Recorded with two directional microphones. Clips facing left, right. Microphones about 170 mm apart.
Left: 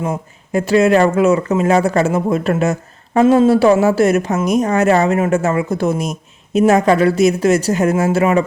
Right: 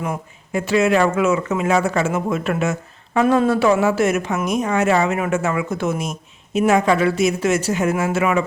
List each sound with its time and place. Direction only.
0.5 s speech: 40° left (ahead or behind)